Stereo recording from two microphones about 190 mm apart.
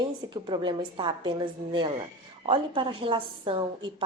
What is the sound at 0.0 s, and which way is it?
A woman's voice, 25° right (ahead or behind).